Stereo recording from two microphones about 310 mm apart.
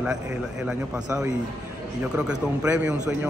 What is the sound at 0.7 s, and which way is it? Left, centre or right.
A man's voice, centre.